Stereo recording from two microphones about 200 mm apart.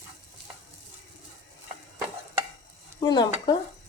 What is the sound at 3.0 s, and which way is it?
Speech, 20° left (ahead or behind).